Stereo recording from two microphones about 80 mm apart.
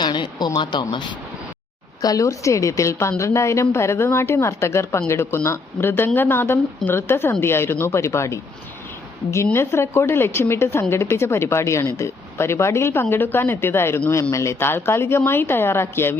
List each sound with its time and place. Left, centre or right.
0.0 s speech: left
2.0 s a woman's voice: left